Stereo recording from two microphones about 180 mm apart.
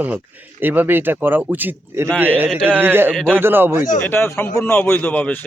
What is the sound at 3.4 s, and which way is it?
Speech, 10° right (ahead or behind).